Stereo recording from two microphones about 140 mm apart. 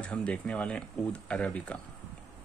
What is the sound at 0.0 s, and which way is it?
Speech, 10° left (ahead or behind).